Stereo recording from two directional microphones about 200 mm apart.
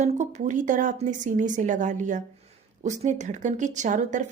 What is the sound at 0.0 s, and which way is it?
Speech, 35° right (ahead or behind).